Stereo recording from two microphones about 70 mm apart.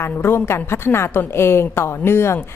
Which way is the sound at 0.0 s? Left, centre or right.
Left.